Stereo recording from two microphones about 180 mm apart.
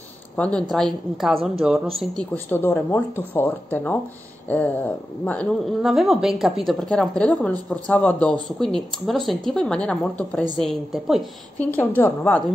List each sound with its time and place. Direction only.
0.4 s speech: 5° left (ahead or behind)
2.5 s speech: 10° left (ahead or behind)
11.6 s speech: 10° left (ahead or behind)